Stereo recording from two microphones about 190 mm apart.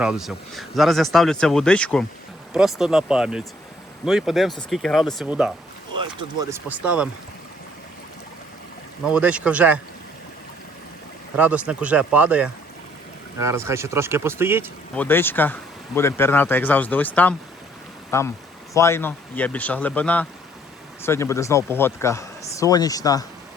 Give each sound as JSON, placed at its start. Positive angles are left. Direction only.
{"t": 0.0, "sound": "speech", "side_deg": -5}
{"t": 6.0, "sound": "speech", "side_deg": -25}
{"t": 6.5, "sound": "speech", "side_deg": -10}
{"t": 9.0, "sound": "speech", "side_deg": -5}
{"t": 11.3, "sound": "speech", "side_deg": -10}
{"t": 14.9, "sound": "speech", "side_deg": 10}